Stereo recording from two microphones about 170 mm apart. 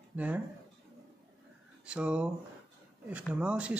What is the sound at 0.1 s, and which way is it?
Speech, 10° right (ahead or behind).